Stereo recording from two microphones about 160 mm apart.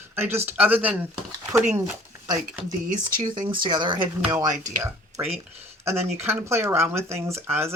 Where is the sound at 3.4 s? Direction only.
30° right (ahead or behind).